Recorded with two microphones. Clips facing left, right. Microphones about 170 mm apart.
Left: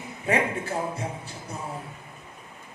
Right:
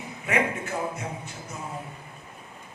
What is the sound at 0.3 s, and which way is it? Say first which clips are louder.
A man's voice: left 1 dB; 30° left (ahead or behind).